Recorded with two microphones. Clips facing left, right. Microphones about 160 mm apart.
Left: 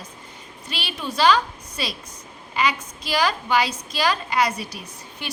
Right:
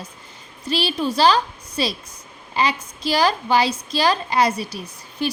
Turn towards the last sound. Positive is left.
turn(degrees=-35)  # may be behind; listen again after turning